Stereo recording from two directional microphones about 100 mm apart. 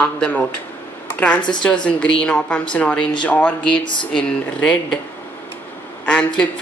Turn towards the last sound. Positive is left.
turn(degrees=10)  # may be behind; listen again after turning